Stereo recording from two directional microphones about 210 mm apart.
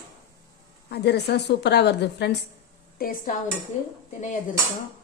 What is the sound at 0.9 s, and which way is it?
A woman's voice, 50° left (ahead or behind).